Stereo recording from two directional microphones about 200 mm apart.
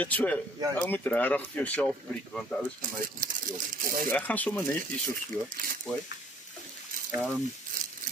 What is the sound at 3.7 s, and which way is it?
Speech, 45° right (ahead or behind).